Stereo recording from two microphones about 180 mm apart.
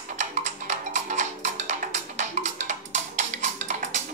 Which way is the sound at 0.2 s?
40° right (ahead or behind).